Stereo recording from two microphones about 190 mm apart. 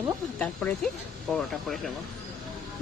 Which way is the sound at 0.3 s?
5° left (ahead or behind).